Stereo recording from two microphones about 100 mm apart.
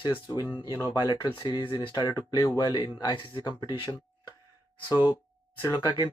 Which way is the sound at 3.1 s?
55° left (ahead or behind).